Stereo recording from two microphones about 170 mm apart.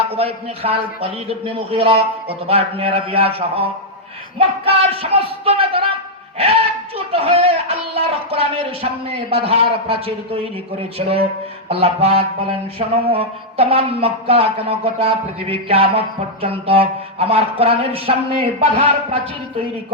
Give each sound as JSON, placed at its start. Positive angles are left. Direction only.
{"t": 0.1, "sound": "music", "side_deg": -35}